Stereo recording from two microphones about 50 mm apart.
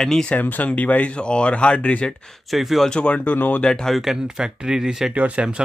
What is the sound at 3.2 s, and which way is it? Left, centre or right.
Speech, left.